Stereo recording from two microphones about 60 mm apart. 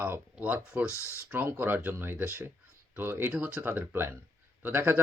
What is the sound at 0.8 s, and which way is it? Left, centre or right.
Speech, left.